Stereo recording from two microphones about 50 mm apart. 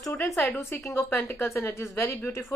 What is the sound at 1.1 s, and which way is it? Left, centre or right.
Speech, left.